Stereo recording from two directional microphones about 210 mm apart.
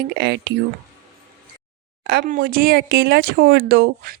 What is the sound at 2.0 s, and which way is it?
Speech, 45° right (ahead or behind).